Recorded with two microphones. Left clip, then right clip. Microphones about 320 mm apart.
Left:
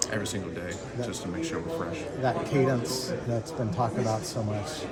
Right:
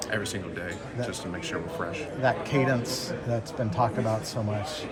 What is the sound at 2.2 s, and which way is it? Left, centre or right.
Speech, centre.